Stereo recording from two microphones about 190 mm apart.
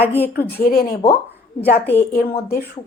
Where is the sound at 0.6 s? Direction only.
50° left (ahead or behind).